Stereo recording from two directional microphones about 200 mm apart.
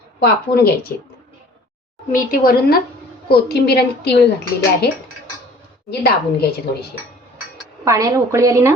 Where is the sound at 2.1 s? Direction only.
45° left (ahead or behind).